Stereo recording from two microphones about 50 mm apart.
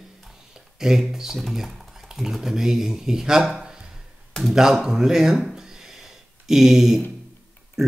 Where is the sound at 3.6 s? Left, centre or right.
Centre.